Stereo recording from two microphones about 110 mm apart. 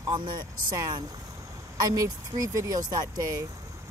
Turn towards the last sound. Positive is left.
turn(degrees=-35)  # may be behind; listen again after turning